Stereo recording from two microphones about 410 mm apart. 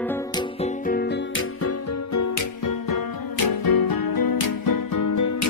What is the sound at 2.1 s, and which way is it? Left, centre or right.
Music, left.